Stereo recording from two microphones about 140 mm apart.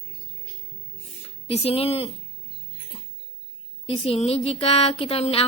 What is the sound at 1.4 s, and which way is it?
Speech, 45° left (ahead or behind).